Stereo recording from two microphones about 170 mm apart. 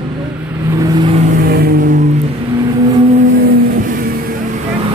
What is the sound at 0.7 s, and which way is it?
Vehicle, 25° right (ahead or behind).